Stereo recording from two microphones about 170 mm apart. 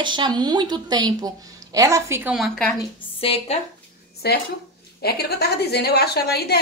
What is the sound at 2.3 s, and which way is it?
Speech, centre (ahead or behind).